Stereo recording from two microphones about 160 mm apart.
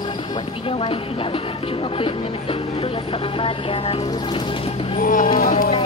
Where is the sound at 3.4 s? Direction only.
35° left (ahead or behind).